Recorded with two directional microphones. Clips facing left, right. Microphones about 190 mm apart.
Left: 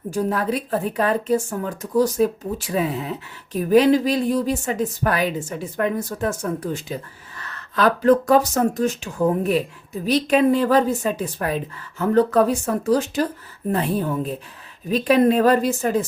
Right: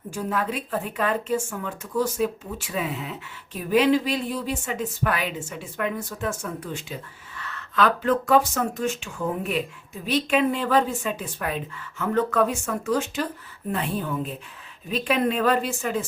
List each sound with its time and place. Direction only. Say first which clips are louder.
0.1 s speech: left 5 dB; 40° left (ahead or behind)